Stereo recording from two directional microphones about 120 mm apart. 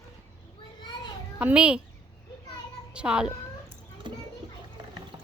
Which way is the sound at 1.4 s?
10° right (ahead or behind).